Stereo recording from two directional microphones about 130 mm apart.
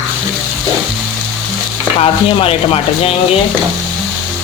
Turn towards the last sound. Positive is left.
turn(degrees=50)  # may be behind; listen again after turning